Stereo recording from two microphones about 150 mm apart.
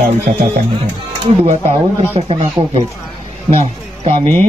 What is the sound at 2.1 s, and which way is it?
Speech, 45° right (ahead or behind).